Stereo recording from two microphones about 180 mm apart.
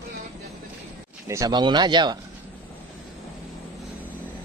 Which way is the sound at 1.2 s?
20° right (ahead or behind).